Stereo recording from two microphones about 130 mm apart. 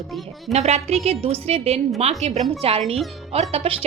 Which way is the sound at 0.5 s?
55° right (ahead or behind).